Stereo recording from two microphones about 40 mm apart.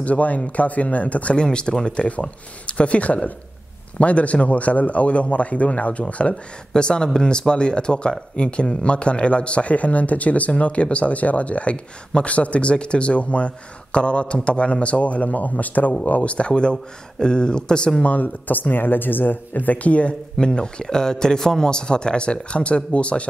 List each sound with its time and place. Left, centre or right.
0.0 s speech: left
1.3 s speech: left
6.7 s speech: left
18.0 s speech: left
20.3 s speech: left